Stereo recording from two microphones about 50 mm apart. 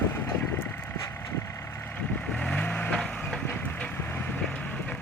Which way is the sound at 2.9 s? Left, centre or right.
Centre.